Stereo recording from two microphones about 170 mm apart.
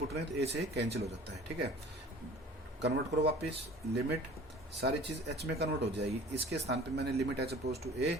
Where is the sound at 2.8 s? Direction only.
80° right.